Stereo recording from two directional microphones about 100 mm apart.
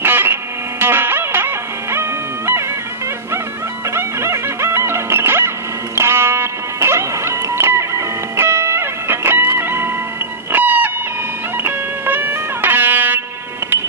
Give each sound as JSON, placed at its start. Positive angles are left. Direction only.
{"t": 0.0, "sound": "music", "side_deg": -20}
{"t": 3.9, "sound": "music", "side_deg": -25}